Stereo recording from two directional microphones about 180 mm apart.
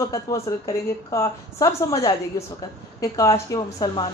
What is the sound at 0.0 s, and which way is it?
A woman's voice, 15° left (ahead or behind).